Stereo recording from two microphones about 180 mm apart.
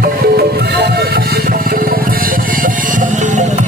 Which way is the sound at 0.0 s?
60° right (ahead or behind).